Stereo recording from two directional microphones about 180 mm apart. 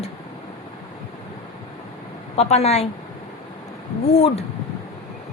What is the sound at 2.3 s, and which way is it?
Speech, 35° left (ahead or behind).